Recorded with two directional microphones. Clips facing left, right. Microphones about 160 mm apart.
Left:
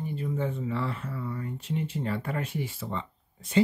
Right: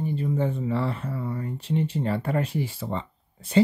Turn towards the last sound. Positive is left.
turn(degrees=-35)  # may be behind; listen again after turning